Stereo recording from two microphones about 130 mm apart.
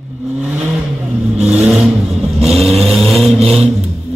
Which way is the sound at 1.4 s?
10° right (ahead or behind).